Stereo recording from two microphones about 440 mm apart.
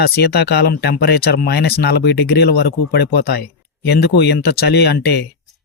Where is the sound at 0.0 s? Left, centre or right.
Left.